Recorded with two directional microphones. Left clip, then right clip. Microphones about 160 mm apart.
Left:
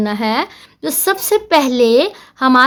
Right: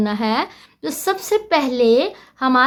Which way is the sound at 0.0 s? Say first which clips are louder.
Left 3 dB; 25° left (ahead or behind).